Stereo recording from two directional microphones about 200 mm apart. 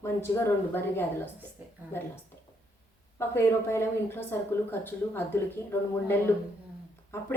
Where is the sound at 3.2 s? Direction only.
10° left (ahead or behind).